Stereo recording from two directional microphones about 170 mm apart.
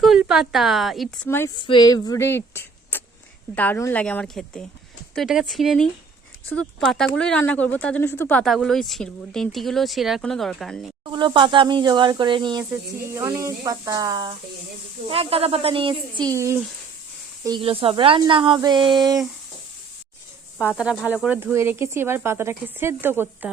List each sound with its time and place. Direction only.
0.0 s a woman's voice: centre (ahead or behind)
1.5 s speech: 25° left (ahead or behind); by 10.9 s centre (ahead or behind)
11.0 s speech: 25° right (ahead or behind)
13.1 s speech: 15° right (ahead or behind)
17.4 s speech: 30° right (ahead or behind)
20.6 s speech: 5° right (ahead or behind)